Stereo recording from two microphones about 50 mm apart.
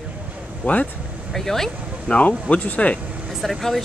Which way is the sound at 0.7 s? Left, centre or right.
Left.